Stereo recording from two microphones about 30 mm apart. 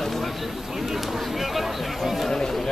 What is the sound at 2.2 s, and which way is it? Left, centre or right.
Speech, centre.